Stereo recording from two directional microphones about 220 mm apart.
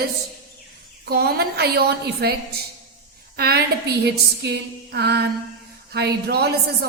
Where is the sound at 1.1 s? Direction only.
45° right (ahead or behind).